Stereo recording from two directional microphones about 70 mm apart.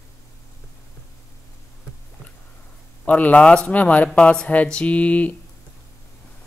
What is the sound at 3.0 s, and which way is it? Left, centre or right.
Speech, left.